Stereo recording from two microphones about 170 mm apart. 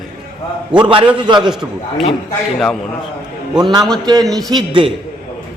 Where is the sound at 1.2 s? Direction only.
25° right (ahead or behind).